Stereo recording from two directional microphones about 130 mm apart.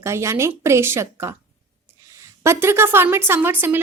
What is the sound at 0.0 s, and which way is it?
A woman's voice, 20° right (ahead or behind).